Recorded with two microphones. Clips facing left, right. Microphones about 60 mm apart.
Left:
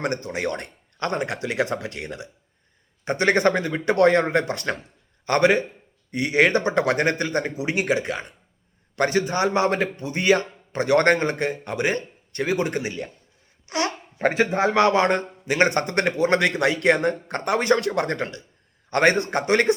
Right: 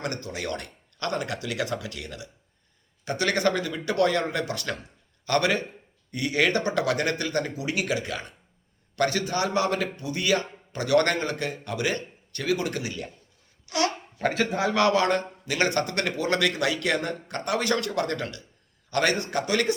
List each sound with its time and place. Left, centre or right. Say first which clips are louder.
0.0 s a man's voice: left 6 dB; left